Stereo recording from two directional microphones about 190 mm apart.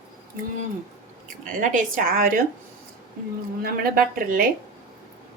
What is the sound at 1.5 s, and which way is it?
Speech, 45° right (ahead or behind).